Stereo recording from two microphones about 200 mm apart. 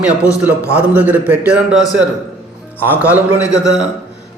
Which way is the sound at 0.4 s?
5° right (ahead or behind).